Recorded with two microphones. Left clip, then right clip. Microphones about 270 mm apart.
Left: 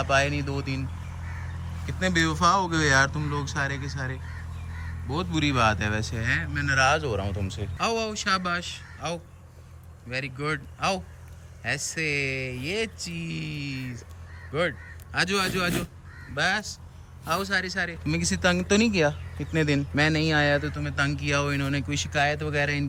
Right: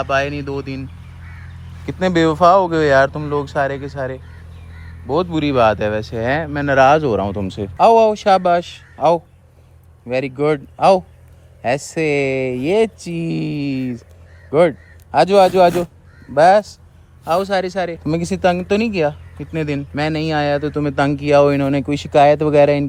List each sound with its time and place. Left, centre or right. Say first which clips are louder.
0.0 s speech: right 5 dB; centre
1.9 s a man's voice: right 10 dB; centre